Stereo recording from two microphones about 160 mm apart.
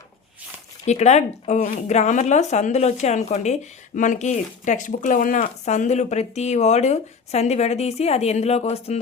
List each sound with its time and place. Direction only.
0.9 s a woman's voice: 45° left (ahead or behind)